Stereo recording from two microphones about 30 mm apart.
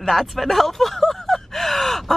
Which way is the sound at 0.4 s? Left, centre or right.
Centre.